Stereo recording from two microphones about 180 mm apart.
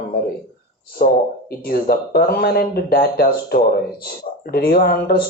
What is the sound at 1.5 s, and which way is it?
Speech, 60° left (ahead or behind).